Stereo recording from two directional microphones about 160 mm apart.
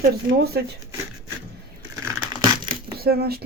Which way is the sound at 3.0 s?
75° right (ahead or behind).